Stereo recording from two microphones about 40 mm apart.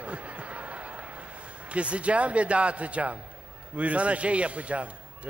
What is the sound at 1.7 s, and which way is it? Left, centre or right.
A man's voice, right.